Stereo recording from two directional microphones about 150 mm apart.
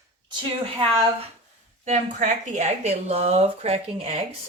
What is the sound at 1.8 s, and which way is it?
Speech, 55° right (ahead or behind).